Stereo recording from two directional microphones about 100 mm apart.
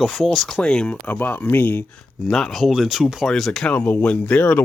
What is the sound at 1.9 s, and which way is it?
Speech, 5° left (ahead or behind).